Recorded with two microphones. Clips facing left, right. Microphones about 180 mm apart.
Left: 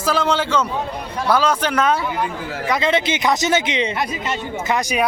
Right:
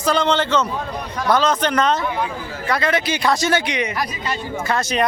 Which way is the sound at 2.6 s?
20° left (ahead or behind).